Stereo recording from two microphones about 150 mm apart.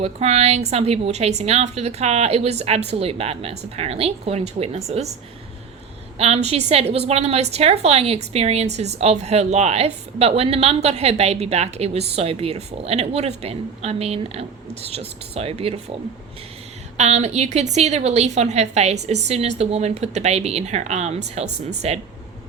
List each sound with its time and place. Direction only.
0.0 s a woman's voice: 45° right (ahead or behind)
6.1 s a woman's voice: 45° right (ahead or behind)
17.0 s a woman's voice: 50° right (ahead or behind)